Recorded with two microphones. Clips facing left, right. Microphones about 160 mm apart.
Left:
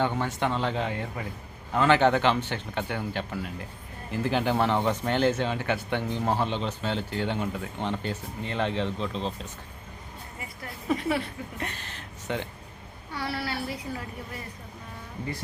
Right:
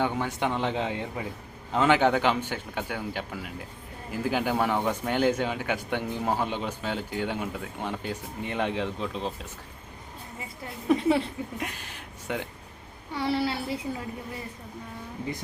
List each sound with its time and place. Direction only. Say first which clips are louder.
0.0 s speech: even; 10° right (ahead or behind)
10.6 s a woman's voice: right 4 dB; 25° right (ahead or behind)
11.5 s speech: right 1 dB; 10° right (ahead or behind)
13.1 s a woman's voice: right 5 dB; 25° right (ahead or behind)